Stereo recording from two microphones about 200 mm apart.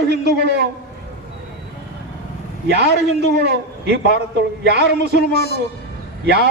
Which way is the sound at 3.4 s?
55° right (ahead or behind).